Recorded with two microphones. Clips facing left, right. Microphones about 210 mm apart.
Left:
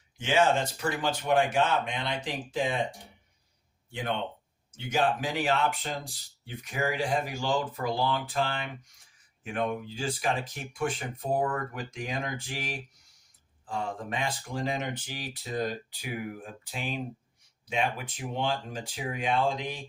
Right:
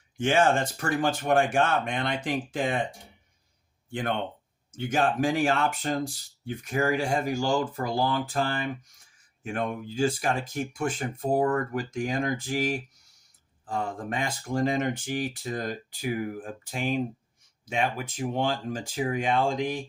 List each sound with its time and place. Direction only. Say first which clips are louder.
0.2 s speech: right 2 dB; 50° right (ahead or behind)
4.7 s speech: right 2 dB; 50° right (ahead or behind)
13.7 s speech: right 3 dB; 45° right (ahead or behind)